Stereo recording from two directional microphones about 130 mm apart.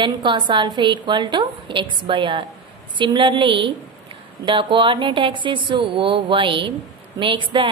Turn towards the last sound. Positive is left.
turn(degrees=-40)  # may be behind; listen again after turning